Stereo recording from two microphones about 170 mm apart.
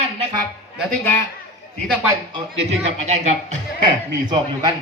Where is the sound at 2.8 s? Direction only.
40° right (ahead or behind).